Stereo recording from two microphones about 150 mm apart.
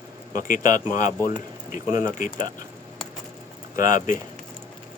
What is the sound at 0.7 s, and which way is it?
Speech, 60° left (ahead or behind).